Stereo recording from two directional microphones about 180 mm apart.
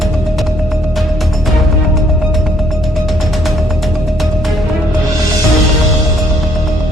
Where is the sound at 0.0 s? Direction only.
Centre (ahead or behind).